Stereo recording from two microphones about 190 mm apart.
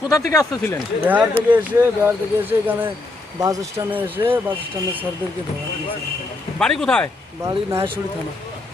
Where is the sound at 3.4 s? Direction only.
15° right (ahead or behind).